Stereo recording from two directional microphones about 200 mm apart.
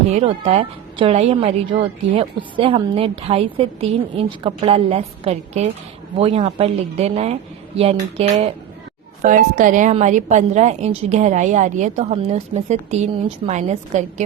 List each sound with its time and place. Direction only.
0.1 s a woman's voice: 30° right (ahead or behind)